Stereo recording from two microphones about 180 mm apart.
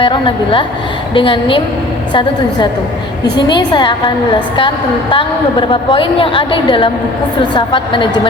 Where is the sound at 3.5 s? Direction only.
25° left (ahead or behind).